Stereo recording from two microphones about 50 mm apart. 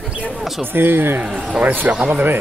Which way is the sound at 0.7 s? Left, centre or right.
Right.